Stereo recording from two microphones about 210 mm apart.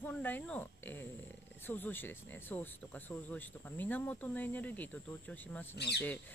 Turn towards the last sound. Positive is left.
turn(degrees=50)  # may be behind; listen again after turning